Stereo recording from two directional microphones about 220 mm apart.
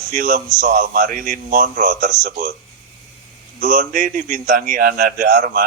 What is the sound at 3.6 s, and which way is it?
A man's voice, 40° right (ahead or behind).